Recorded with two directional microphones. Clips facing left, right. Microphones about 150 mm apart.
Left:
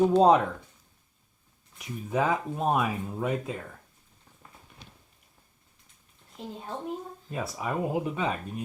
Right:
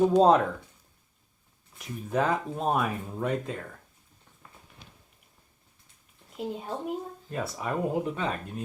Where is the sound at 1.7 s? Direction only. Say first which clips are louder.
Even; centre (ahead or behind).